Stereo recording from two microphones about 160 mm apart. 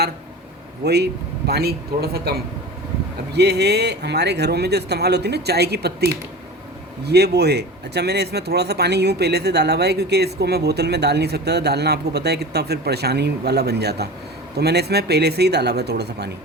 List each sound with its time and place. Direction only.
0.9 s speech: 90° right
3.3 s speech: 90° right
7.0 s speech: 90° right